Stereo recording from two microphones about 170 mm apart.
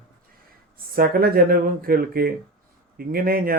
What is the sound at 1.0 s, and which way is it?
Speech, 60° right (ahead or behind).